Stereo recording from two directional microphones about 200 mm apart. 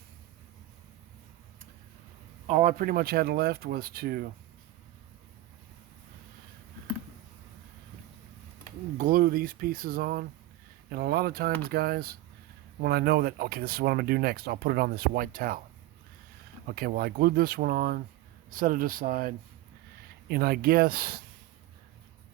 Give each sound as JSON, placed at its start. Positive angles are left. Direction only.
{"t": 2.5, "sound": "speech", "side_deg": -40}
{"t": 9.0, "sound": "speech", "side_deg": -45}
{"t": 16.7, "sound": "speech", "side_deg": -50}